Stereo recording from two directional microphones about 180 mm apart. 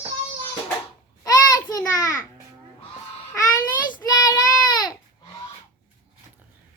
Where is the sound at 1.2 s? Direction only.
20° left (ahead or behind).